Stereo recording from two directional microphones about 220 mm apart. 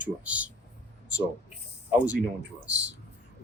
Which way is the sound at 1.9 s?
10° right (ahead or behind).